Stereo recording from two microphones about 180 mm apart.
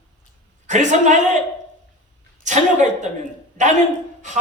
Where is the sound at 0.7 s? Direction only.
40° right (ahead or behind).